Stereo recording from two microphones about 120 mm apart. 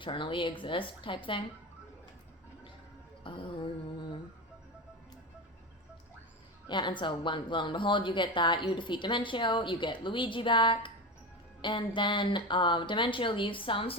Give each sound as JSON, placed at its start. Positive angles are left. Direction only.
{"t": 0.0, "sound": "speech", "side_deg": 45}
{"t": 3.3, "sound": "music", "side_deg": 45}
{"t": 6.7, "sound": "speech", "side_deg": 40}